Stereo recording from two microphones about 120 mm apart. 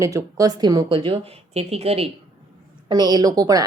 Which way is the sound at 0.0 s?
30° right (ahead or behind).